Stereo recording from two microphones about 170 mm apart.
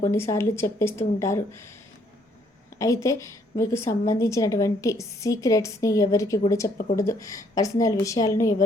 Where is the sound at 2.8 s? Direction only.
20° left (ahead or behind).